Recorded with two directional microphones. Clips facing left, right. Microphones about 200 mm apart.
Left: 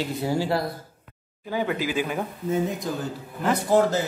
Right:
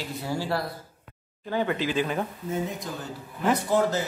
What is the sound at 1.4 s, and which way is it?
Speech, 10° left (ahead or behind).